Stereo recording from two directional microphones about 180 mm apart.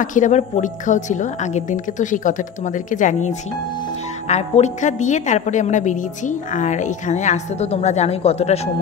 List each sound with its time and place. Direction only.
0.0 s a woman's voice: 45° left (ahead or behind)